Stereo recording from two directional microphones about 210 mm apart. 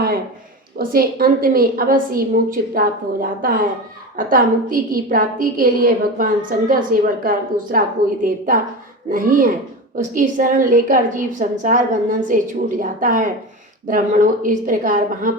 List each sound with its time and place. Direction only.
0.8 s a woman's voice: 45° right (ahead or behind)